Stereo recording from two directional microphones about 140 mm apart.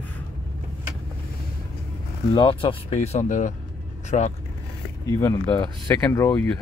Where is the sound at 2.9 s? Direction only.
55° left (ahead or behind).